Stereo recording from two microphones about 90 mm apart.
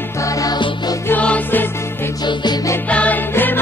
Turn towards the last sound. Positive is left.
turn(degrees=20)  # may be behind; listen again after turning